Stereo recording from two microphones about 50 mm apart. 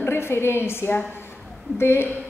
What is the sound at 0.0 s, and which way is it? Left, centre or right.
A woman's voice, left.